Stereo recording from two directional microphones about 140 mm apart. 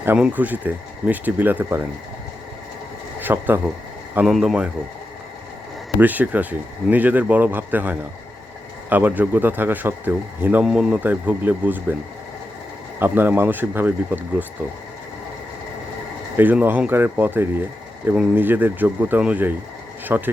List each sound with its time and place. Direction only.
0.0 s speech: 10° right (ahead or behind)
3.2 s speech: 15° right (ahead or behind)
6.0 s speech: 10° right (ahead or behind)
13.0 s speech: 15° right (ahead or behind)
16.4 s speech: 10° right (ahead or behind)